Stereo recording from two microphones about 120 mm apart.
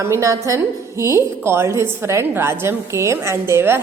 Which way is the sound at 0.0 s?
25° right (ahead or behind).